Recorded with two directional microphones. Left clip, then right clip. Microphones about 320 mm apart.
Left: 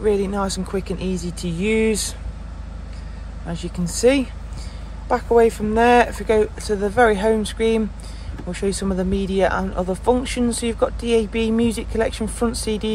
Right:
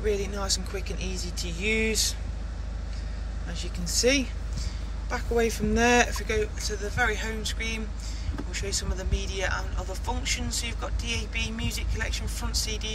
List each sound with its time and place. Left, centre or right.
0.0 s speech: centre
3.4 s speech: centre